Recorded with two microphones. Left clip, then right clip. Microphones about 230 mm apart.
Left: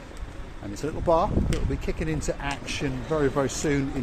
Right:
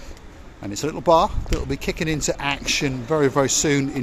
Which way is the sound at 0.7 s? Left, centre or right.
Right.